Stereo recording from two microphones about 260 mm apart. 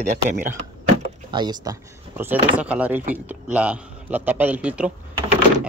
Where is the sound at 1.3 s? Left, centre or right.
Centre.